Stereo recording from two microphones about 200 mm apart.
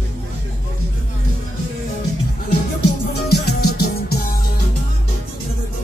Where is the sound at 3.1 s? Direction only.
55° left (ahead or behind).